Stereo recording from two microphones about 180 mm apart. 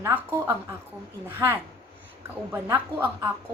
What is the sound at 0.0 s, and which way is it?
Speech, 10° right (ahead or behind).